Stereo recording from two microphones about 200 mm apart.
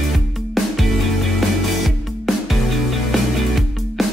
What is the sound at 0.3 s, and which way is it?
Music, centre (ahead or behind).